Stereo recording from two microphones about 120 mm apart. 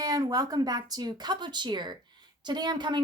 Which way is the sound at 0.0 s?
30° right (ahead or behind).